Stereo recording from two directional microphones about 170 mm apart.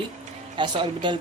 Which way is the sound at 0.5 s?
25° right (ahead or behind).